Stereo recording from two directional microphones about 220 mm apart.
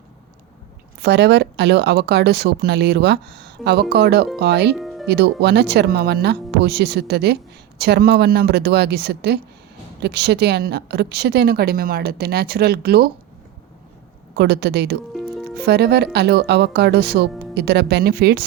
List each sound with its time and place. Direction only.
1.0 s a woman's voice: 50° right (ahead or behind)
4.8 s music: centre (ahead or behind)
5.0 s a woman's voice: 50° right (ahead or behind)
14.3 s a woman's voice: 50° right (ahead or behind)
15.1 s music: centre (ahead or behind)
15.5 s a woman's voice: 50° right (ahead or behind)